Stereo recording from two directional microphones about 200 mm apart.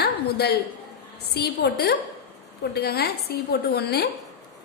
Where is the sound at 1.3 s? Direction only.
55° left (ahead or behind).